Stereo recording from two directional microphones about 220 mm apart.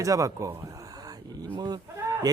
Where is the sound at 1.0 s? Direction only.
20° right (ahead or behind).